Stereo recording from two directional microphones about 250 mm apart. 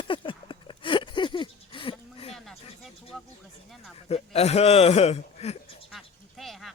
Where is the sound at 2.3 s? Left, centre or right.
Centre.